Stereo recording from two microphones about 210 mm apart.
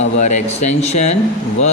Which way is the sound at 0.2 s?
35° left (ahead or behind).